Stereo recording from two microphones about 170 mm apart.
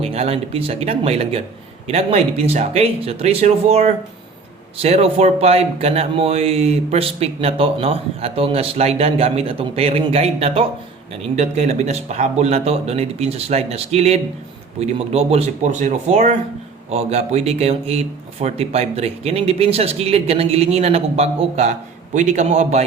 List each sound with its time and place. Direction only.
0.0 s speech: 35° right (ahead or behind)